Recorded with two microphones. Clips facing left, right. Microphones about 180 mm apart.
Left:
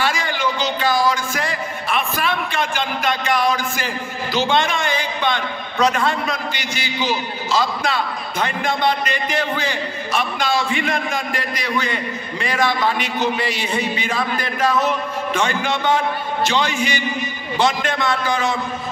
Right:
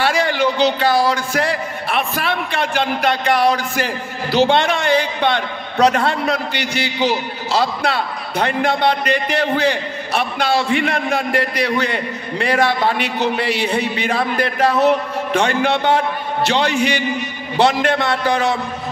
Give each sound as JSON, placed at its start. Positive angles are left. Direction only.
{"t": 0.0, "sound": "a man's voice", "side_deg": -65}